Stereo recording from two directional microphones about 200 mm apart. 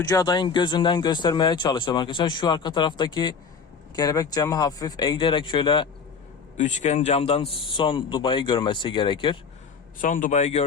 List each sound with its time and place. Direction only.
0.0 s speech: 20° left (ahead or behind)
6.6 s a man's voice: 35° left (ahead or behind)
10.0 s a man's voice: 40° left (ahead or behind)